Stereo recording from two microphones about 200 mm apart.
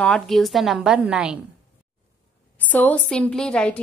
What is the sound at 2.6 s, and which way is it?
A woman's voice, 10° left (ahead or behind).